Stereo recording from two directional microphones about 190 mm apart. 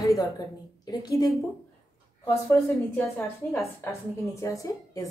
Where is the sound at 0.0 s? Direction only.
15° left (ahead or behind).